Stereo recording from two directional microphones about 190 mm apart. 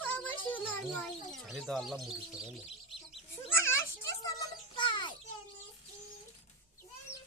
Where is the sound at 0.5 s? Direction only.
5° left (ahead or behind).